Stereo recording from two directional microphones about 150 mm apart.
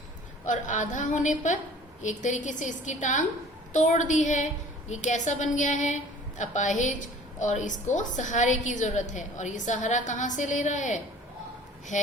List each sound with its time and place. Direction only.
0.4 s a woman's voice: 55° left (ahead or behind)